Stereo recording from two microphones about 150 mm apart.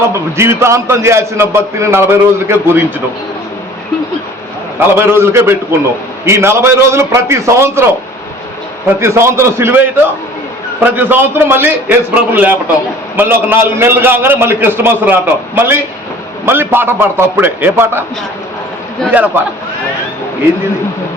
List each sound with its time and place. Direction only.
0.1 s a man's voice: 15° right (ahead or behind)
4.8 s a man's voice: 15° right (ahead or behind)
9.0 s a man's voice: 15° right (ahead or behind)
19.1 s a man's voice: 10° right (ahead or behind)